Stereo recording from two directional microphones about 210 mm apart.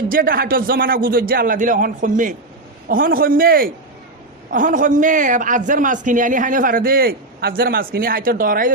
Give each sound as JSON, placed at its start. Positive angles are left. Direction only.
{"t": 0.1, "sound": "a man's voice", "side_deg": -45}